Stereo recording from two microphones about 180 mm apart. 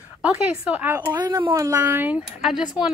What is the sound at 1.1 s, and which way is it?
A woman's voice, 25° right (ahead or behind).